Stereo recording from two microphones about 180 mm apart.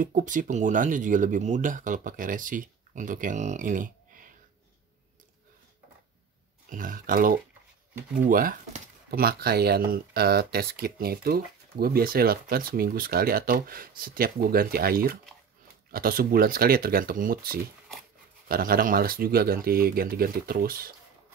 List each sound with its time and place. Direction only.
0.0 s speech: 45° right (ahead or behind)
6.7 s speech: 50° right (ahead or behind)